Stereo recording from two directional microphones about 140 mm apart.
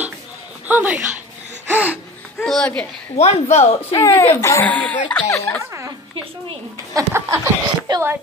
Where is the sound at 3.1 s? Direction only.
50° left (ahead or behind).